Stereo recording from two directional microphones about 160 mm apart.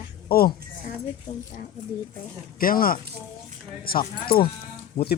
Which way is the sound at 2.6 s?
65° left (ahead or behind).